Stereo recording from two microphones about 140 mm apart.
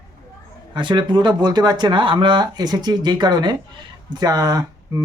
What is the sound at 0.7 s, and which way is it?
Speech, 35° right (ahead or behind).